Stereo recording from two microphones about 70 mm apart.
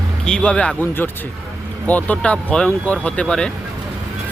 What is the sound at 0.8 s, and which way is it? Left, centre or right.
Speech, left.